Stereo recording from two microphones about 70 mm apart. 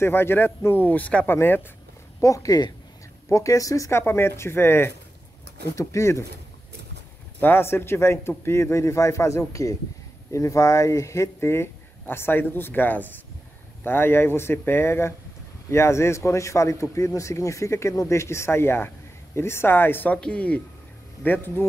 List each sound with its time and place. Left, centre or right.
0.0 s speech: left
2.2 s a woman's voice: left
3.3 s a man's voice: left
3.9 s a man's voice: left
7.3 s a man's voice: left
20.2 s speech: centre
21.2 s speech: left